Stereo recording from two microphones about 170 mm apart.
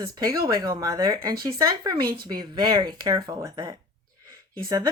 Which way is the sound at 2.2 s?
25° right (ahead or behind).